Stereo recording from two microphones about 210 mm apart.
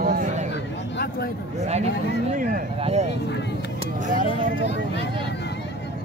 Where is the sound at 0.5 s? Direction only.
50° left (ahead or behind).